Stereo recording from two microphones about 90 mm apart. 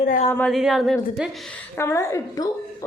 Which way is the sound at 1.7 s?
30° left (ahead or behind).